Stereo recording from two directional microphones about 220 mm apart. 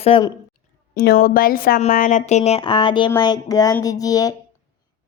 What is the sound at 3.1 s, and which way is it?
Speech, 15° left (ahead or behind).